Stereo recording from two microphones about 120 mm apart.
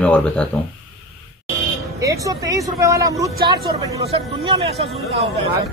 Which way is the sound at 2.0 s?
25° right (ahead or behind).